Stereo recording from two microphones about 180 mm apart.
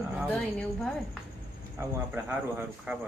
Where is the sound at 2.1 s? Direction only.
10° right (ahead or behind).